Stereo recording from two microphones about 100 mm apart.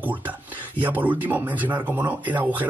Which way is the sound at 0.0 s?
15° right (ahead or behind).